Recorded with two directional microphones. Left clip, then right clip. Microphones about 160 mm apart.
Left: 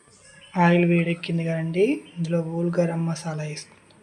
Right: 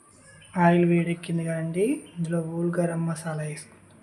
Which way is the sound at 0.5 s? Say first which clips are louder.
Left 1 dB; 15° left (ahead or behind).